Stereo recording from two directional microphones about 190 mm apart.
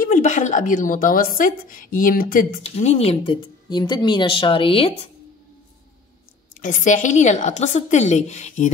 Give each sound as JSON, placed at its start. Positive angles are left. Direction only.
{"t": 0.0, "sound": "a woman's voice", "side_deg": 40}
{"t": 2.6, "sound": "speech", "side_deg": 35}
{"t": 6.6, "sound": "a woman's voice", "side_deg": 40}